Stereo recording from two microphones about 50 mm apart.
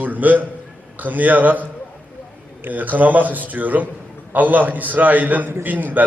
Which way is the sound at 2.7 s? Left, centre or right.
Right.